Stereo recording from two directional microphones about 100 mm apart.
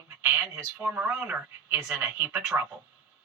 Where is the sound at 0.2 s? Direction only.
20° right (ahead or behind).